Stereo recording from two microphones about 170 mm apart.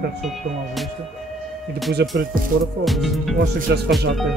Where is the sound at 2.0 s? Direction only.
90° right.